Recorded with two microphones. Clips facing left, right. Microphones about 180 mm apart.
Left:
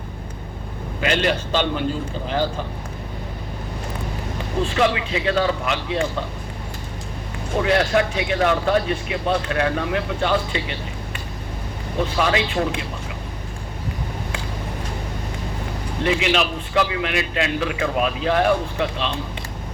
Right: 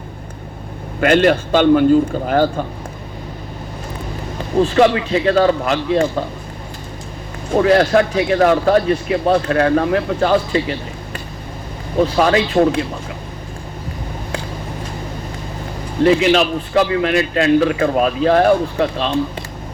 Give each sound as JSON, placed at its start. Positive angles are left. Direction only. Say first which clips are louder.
{"t": 1.0, "sound": "a man's voice", "louder": "right 8 dB", "side_deg": -50}
{"t": 4.6, "sound": "speech", "louder": "right 7 dB", "side_deg": -40}
{"t": 7.5, "sound": "speech", "louder": "right 6 dB", "side_deg": -40}
{"t": 11.9, "sound": "speech", "louder": "right 7 dB", "side_deg": -40}
{"t": 16.0, "sound": "speech", "louder": "right 8 dB", "side_deg": -40}